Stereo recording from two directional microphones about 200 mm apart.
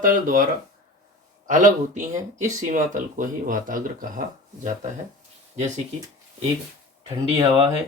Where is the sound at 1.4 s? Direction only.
40° right (ahead or behind).